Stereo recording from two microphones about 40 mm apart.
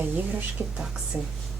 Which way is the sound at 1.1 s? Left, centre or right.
Right.